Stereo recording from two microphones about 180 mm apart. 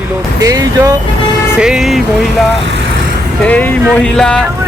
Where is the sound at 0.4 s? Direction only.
20° right (ahead or behind).